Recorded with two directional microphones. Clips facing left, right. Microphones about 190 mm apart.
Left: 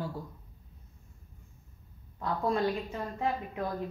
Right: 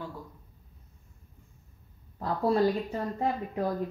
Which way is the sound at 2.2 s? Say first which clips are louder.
Right 4 dB; 35° right (ahead or behind).